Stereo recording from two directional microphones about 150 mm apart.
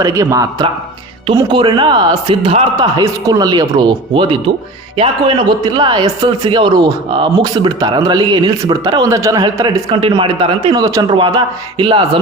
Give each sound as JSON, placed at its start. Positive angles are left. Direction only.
{"t": 0.0, "sound": "speech", "side_deg": -25}
{"t": 1.5, "sound": "speech", "side_deg": -35}
{"t": 10.8, "sound": "speech", "side_deg": -25}